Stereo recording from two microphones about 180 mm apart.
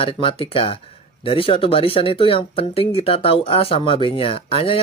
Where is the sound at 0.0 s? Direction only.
30° left (ahead or behind).